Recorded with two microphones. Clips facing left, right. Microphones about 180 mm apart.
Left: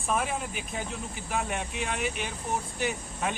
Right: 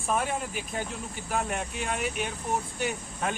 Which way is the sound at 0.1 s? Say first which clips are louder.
Right 1 dB; centre (ahead or behind).